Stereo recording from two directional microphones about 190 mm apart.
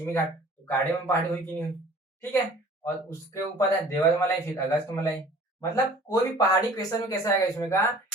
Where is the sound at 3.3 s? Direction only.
15° left (ahead or behind).